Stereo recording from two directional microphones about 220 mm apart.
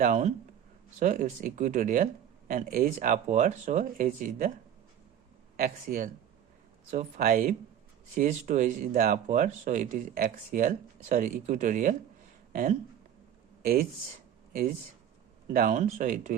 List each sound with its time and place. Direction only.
0.0 s speech: 35° right (ahead or behind)
5.5 s speech: 40° right (ahead or behind)
14.5 s speech: 40° right (ahead or behind)